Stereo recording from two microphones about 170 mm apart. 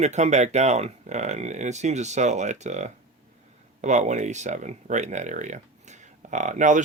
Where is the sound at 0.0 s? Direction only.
40° right (ahead or behind).